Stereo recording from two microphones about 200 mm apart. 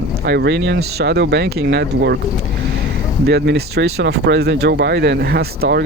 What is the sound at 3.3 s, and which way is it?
Speech, 55° right (ahead or behind).